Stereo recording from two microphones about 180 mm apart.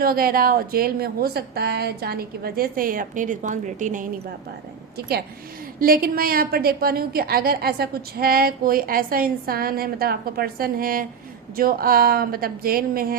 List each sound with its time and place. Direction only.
0.0 s a woman's voice: 55° right (ahead or behind)
4.9 s a woman's voice: 60° right (ahead or behind)